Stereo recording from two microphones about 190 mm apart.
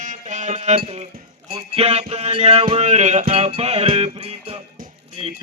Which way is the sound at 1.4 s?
30° right (ahead or behind).